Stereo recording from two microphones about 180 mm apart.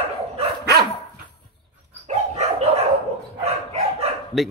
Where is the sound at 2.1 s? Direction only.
35° right (ahead or behind).